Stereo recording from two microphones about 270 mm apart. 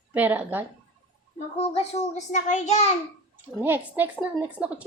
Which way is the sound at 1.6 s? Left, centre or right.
Left.